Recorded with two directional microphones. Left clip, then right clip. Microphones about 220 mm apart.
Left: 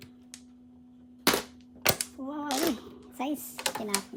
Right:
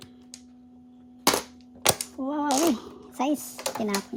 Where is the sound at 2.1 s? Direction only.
30° right (ahead or behind).